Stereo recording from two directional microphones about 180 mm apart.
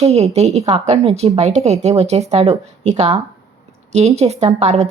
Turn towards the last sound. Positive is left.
turn(degrees=-35)  # may be behind; listen again after turning